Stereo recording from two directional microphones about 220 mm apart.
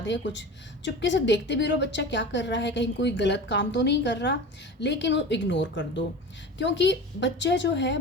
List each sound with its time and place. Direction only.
0.0 s a woman's voice: 55° left (ahead or behind)